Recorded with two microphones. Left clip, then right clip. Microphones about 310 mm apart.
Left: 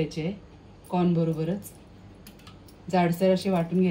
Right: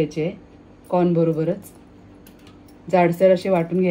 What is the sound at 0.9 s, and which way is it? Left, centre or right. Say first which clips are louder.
Speech: right 8 dB; centre.